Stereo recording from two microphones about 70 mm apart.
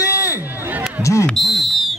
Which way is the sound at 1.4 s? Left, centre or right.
Centre.